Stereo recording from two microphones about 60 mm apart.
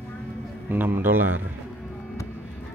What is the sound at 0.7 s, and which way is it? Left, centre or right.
Speech, right.